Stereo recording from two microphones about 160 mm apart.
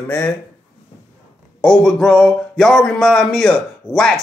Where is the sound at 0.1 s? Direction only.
10° left (ahead or behind).